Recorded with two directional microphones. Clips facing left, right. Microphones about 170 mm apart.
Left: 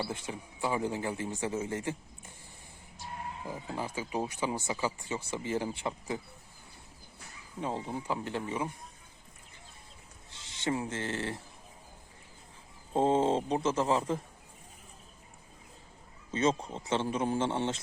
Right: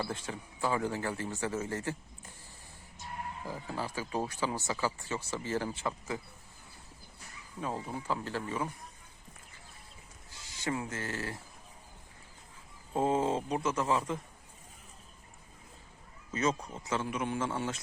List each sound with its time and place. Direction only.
0.1 s speech: 15° left (ahead or behind)
3.4 s speech: 20° left (ahead or behind)
7.6 s a man's voice: 25° left (ahead or behind)
10.2 s speech: 25° left (ahead or behind)
12.9 s a man's voice: 30° left (ahead or behind)
16.3 s a man's voice: 30° left (ahead or behind)